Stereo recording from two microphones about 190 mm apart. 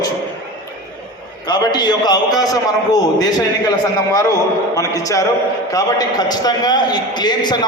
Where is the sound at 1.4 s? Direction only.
20° left (ahead or behind).